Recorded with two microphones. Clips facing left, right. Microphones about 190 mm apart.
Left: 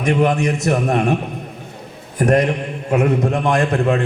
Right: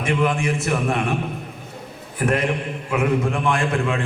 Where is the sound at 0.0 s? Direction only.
40° left (ahead or behind).